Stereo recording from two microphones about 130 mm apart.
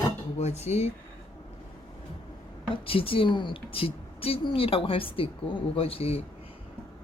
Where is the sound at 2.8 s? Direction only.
45° left (ahead or behind).